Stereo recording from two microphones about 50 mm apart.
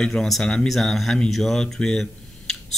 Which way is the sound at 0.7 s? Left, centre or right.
Centre.